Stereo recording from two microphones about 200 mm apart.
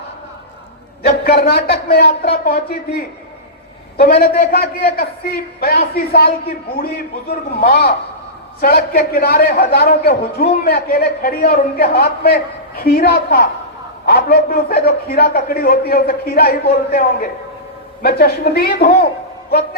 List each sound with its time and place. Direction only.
1.0 s a man's voice: 45° left (ahead or behind)
3.9 s a man's voice: 50° left (ahead or behind)